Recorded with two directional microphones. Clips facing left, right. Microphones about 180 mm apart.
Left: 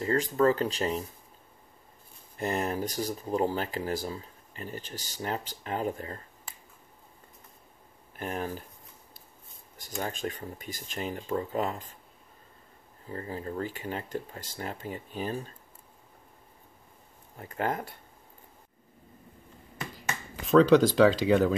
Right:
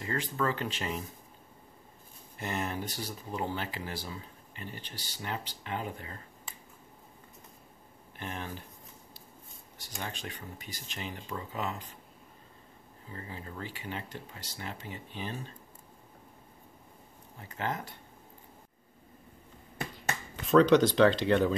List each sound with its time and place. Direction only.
0.0 s speech: 40° left (ahead or behind)
2.3 s speech: 40° left (ahead or behind)
8.2 s speech: 40° left (ahead or behind)
9.8 s speech: 45° left (ahead or behind)
13.1 s speech: 40° left (ahead or behind)
17.4 s speech: 45° left (ahead or behind)
20.4 s speech: centre (ahead or behind)